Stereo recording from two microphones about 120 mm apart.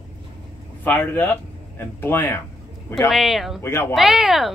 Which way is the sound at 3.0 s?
Centre (ahead or behind).